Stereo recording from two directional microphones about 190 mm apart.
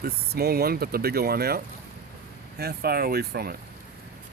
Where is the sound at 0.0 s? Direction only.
55° right (ahead or behind).